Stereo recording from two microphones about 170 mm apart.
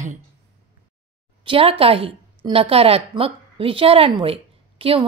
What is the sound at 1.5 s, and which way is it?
A woman's voice, 35° right (ahead or behind).